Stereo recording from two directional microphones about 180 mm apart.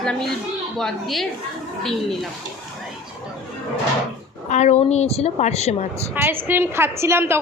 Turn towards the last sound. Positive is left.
turn(degrees=-15)  # may be behind; listen again after turning